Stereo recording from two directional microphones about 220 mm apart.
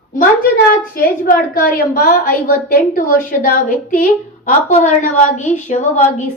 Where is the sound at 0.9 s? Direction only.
40° left (ahead or behind).